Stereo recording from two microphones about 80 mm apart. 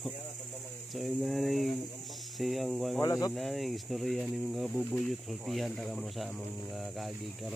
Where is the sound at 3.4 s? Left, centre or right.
Centre.